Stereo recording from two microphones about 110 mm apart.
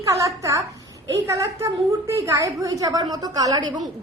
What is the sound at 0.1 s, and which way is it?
A woman's voice, 30° right (ahead or behind).